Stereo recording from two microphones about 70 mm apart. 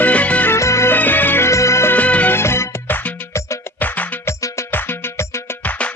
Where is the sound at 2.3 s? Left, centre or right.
Left.